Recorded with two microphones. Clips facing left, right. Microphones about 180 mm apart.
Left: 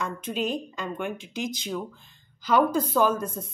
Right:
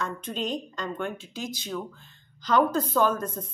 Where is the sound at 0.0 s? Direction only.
10° left (ahead or behind).